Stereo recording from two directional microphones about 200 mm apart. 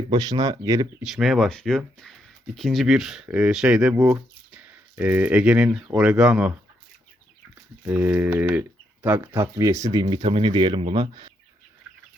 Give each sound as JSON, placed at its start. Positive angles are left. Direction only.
{"t": 0.1, "sound": "speech", "side_deg": -20}
{"t": 1.0, "sound": "speech", "side_deg": 0}
{"t": 7.9, "sound": "speech", "side_deg": -10}